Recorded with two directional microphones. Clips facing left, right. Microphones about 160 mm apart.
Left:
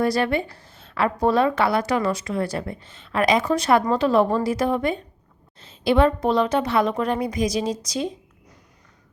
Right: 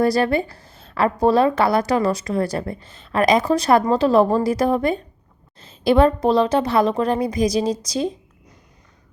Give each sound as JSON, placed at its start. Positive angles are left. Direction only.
{"t": 0.0, "sound": "a woman's voice", "side_deg": -35}